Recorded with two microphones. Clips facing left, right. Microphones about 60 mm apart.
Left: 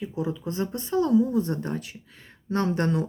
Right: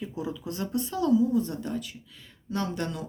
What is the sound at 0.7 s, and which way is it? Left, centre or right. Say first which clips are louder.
Speech: left 2 dB; left.